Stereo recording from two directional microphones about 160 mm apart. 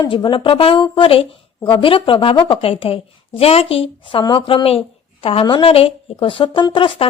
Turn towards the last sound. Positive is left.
turn(degrees=35)  # may be behind; listen again after turning